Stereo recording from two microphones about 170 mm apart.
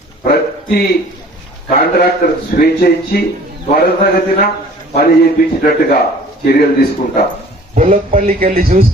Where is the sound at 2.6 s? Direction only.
65° left (ahead or behind).